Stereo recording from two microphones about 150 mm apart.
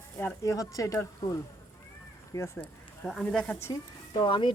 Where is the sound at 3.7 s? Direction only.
30° left (ahead or behind).